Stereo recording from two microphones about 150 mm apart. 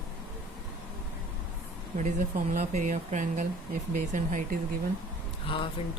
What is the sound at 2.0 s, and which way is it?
Speech, 55° right (ahead or behind).